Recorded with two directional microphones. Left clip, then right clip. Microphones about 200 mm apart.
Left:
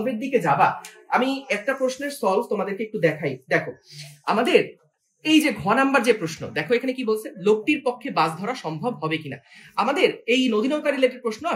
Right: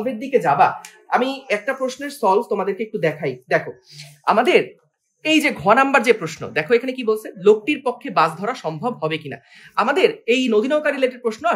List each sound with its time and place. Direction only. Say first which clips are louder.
0.3 s speech: right 4 dB; 40° right (ahead or behind)